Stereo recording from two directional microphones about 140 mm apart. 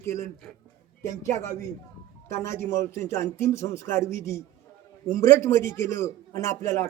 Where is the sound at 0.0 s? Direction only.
20° left (ahead or behind).